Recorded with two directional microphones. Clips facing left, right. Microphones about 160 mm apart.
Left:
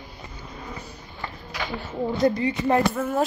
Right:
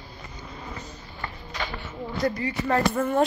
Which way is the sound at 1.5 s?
10° left (ahead or behind).